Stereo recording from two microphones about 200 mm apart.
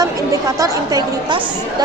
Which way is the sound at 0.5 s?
15° right (ahead or behind).